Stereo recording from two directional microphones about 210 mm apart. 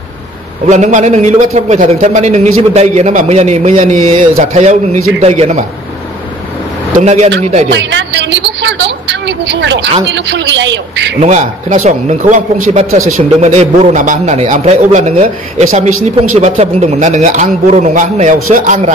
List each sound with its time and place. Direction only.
0.7 s speech: 35° right (ahead or behind)
7.0 s speech: 35° right (ahead or behind)
7.7 s a sound: 60° right (ahead or behind)
10.0 s a man's voice: 55° right (ahead or behind)
11.1 s speech: 35° right (ahead or behind)